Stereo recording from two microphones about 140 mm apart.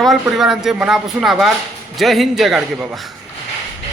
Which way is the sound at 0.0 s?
Centre (ahead or behind).